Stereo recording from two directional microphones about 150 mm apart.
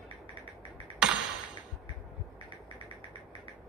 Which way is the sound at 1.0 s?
5° right (ahead or behind).